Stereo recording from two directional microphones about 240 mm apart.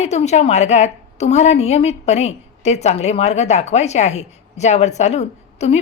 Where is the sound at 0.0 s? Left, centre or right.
Left.